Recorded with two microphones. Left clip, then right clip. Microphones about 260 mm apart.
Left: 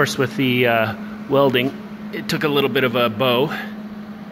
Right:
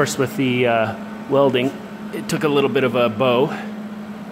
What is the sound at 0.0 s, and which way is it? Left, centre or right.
Speech, centre.